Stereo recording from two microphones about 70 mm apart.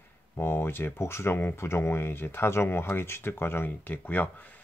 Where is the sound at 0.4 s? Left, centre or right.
Left.